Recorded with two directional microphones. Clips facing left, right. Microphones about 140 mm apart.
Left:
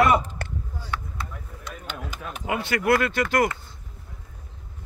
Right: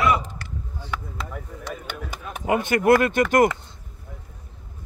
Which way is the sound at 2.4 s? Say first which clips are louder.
Right 5 dB; 45° right (ahead or behind).